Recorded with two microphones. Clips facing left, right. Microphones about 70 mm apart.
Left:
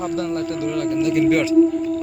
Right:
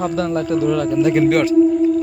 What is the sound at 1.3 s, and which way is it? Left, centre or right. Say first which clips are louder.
Speech: right 2 dB; right.